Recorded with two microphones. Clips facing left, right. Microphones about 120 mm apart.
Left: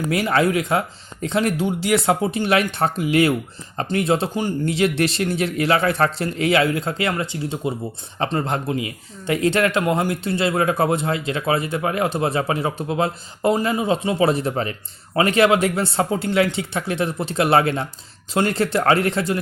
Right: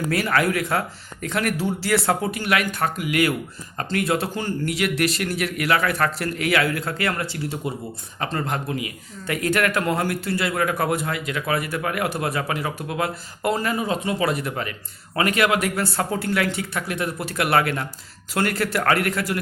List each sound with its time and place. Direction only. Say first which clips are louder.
0.1 s speech: left 3 dB; 20° left (ahead or behind)